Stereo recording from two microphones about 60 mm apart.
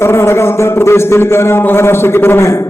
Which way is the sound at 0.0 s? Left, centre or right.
Left.